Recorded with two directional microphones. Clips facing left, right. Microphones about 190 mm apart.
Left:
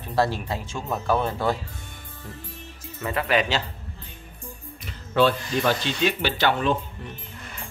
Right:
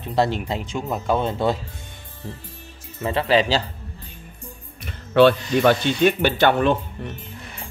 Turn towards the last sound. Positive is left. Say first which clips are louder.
# right 4 dB
turn(degrees=-60)  # may be behind; listen again after turning